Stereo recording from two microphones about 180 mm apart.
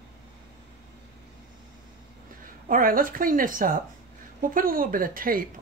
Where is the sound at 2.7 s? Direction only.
50° right (ahead or behind).